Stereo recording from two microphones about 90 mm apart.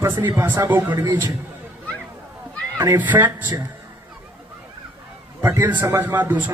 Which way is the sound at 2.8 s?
25° right (ahead or behind).